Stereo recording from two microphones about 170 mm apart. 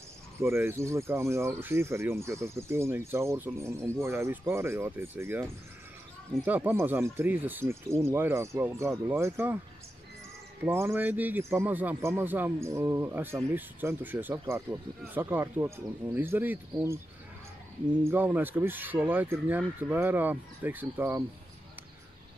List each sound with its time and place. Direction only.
0.4 s speech: 15° right (ahead or behind)
10.6 s speech: 15° right (ahead or behind)
18.0 s speech: 10° right (ahead or behind)